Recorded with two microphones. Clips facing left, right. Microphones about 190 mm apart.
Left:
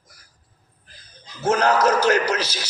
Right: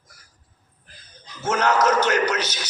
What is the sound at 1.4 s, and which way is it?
A man's voice, 35° left (ahead or behind).